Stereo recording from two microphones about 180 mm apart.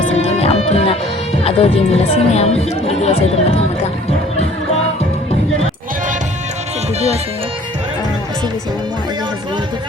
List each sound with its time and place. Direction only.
0.2 s music: 35° left (ahead or behind)
1.5 s speech: 35° left (ahead or behind)